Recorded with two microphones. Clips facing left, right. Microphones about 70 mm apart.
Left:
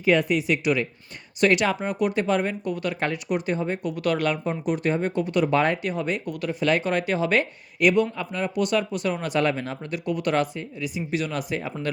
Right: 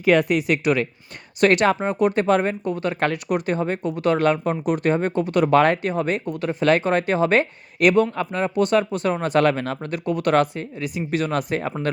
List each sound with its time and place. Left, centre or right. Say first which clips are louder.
0.0 s a woman's voice: right 3 dB; right
1.8 s a woman's voice: right 4 dB; right
3.0 s speech: right 4 dB; right
3.8 s a woman's voice: right 6 dB; right
4.4 s speech: right 4 dB; right
5.8 s speech: right 4 dB; right
6.2 s a woman's voice: right 5 dB; right
7.8 s speech: right 3 dB; right
8.4 s a woman's voice: right 4 dB; right
9.4 s a woman's voice: right 5 dB; right